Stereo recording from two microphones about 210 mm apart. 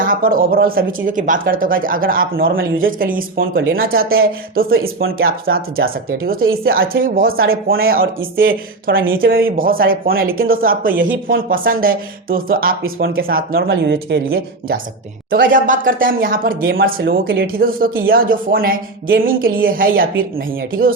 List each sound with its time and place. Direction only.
0.0 s speech: 40° right (ahead or behind)
15.3 s speech: 40° right (ahead or behind)